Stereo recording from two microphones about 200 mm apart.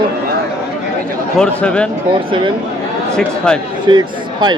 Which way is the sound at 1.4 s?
5° left (ahead or behind).